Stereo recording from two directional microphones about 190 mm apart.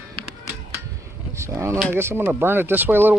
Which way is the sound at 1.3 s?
15° right (ahead or behind).